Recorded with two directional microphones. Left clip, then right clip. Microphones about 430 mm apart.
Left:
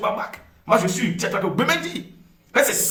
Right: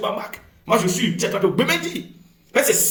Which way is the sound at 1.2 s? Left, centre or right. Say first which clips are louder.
Right 3 dB; centre.